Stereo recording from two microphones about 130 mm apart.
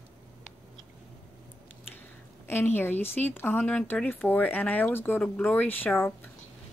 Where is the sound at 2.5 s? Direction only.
15° left (ahead or behind).